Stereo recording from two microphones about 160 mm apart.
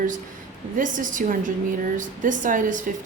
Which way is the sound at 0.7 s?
55° right (ahead or behind).